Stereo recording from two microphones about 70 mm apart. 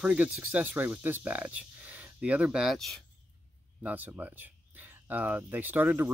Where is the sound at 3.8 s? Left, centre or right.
Right.